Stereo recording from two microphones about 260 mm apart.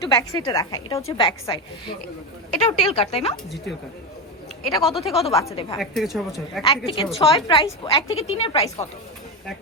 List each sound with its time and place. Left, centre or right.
0.0 s a woman's voice: centre
4.9 s speech: centre
5.1 s a woman's voice: left
5.4 s a woman's voice: centre
5.8 s speech: centre
6.6 s a woman's voice: centre